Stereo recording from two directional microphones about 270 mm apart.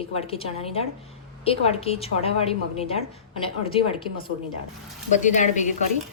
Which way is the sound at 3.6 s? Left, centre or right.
Centre.